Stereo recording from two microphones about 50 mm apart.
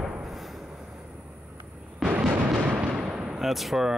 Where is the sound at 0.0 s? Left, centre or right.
Centre.